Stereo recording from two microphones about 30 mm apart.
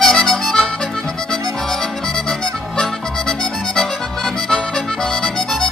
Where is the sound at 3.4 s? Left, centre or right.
Centre.